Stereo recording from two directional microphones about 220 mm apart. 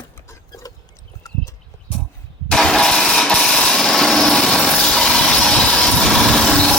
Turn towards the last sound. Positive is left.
turn(degrees=5)  # may be behind; listen again after turning